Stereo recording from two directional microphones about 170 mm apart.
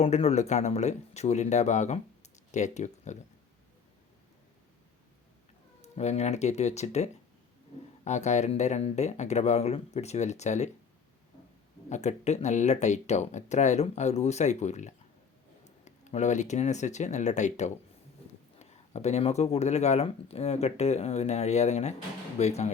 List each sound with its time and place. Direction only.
0.0 s speech: 40° left (ahead or behind)
5.8 s speech: 40° left (ahead or behind)
11.9 s speech: 40° left (ahead or behind)